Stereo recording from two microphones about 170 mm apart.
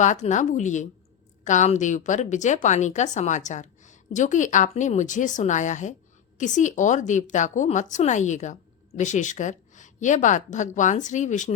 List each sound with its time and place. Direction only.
0.0 s speech: 45° left (ahead or behind)